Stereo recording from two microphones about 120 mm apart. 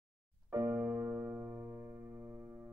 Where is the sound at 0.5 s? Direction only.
20° right (ahead or behind).